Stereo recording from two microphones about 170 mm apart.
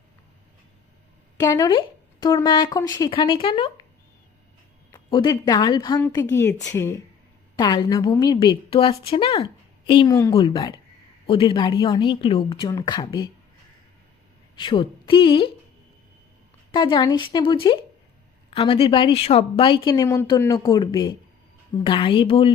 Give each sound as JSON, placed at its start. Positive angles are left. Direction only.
{"t": 1.4, "sound": "speech", "side_deg": 20}
{"t": 4.9, "sound": "speech", "side_deg": 25}
{"t": 14.5, "sound": "a woman's voice", "side_deg": 30}
{"t": 16.7, "sound": "a woman's voice", "side_deg": 25}